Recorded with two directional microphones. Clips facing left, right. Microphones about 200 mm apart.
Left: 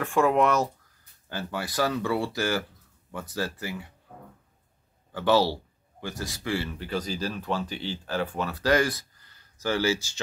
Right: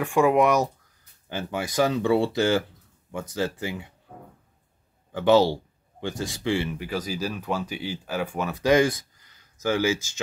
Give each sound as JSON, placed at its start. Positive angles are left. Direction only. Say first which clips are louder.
{"t": 0.0, "sound": "speech", "louder": "right 3 dB", "side_deg": -15}
{"t": 5.1, "sound": "speech", "louder": "right 4 dB", "side_deg": -20}
{"t": 6.9, "sound": "speech", "louder": "right 1 dB", "side_deg": -10}